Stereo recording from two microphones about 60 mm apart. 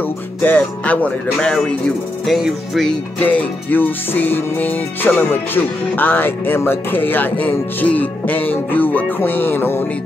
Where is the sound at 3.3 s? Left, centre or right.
Left.